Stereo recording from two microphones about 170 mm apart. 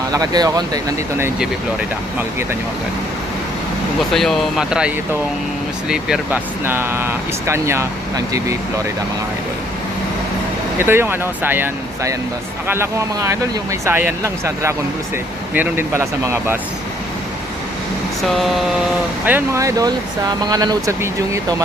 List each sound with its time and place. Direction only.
0.1 s speech: 20° right (ahead or behind)
4.1 s speech: centre (ahead or behind)
5.9 s speech: 5° right (ahead or behind)
10.8 s speech: 15° right (ahead or behind)
18.2 s speech: centre (ahead or behind)
19.2 s speech: 15° right (ahead or behind)